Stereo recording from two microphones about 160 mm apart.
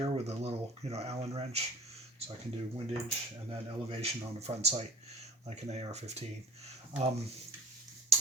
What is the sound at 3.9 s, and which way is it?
Speech, 40° right (ahead or behind).